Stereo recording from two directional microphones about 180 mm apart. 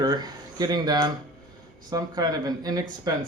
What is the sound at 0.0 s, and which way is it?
Speech, 25° right (ahead or behind).